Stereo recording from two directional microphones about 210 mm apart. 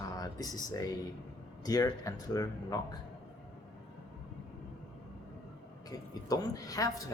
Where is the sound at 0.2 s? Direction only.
20° left (ahead or behind).